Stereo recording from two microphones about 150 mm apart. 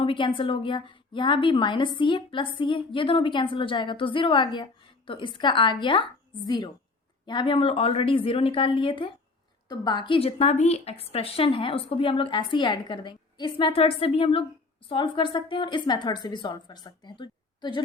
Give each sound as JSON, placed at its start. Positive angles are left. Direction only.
{"t": 0.0, "sound": "a woman's voice", "side_deg": 35}